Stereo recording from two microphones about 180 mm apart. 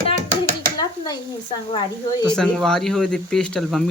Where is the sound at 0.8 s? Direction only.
20° left (ahead or behind).